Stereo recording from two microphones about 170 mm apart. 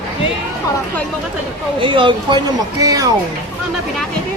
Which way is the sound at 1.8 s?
30° right (ahead or behind).